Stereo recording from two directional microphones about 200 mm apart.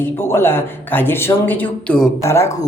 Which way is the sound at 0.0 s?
10° left (ahead or behind).